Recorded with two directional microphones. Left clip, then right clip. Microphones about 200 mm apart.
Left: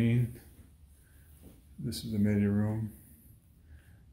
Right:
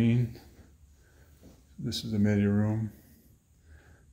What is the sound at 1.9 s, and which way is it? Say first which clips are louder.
Speech: right 3 dB; 25° right (ahead or behind).